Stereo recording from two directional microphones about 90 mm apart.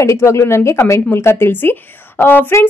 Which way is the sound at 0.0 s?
30° left (ahead or behind).